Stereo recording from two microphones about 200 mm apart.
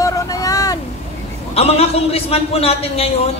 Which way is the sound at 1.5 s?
30° left (ahead or behind).